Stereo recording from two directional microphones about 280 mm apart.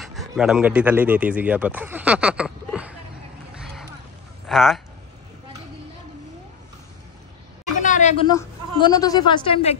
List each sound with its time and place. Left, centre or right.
0.0 s a man's voice: centre
3.5 s vehicle: centre
4.5 s speech: centre
7.8 s a sound: left
8.3 s a woman's voice: centre